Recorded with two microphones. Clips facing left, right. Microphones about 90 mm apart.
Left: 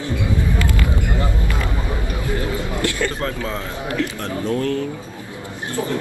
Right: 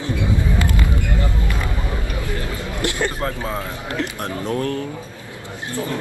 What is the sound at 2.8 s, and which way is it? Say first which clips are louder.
Speech: right 2 dB; 20° right (ahead or behind).